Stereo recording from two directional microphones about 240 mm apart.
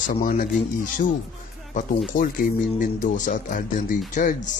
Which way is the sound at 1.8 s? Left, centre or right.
Left.